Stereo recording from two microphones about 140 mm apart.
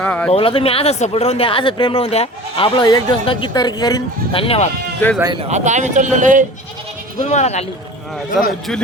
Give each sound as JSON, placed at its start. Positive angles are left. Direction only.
{"t": 0.0, "sound": "speech", "side_deg": 10}
{"t": 0.3, "sound": "speech", "side_deg": 40}
{"t": 4.3, "sound": "speech", "side_deg": 40}
{"t": 5.2, "sound": "speech", "side_deg": -35}
{"t": 5.5, "sound": "speech", "side_deg": -55}
{"t": 7.2, "sound": "speech", "side_deg": 55}